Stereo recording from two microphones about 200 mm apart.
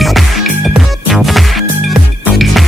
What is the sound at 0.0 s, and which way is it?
Music, centre (ahead or behind).